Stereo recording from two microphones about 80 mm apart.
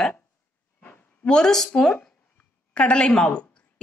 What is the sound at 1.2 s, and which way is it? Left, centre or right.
Speech, centre.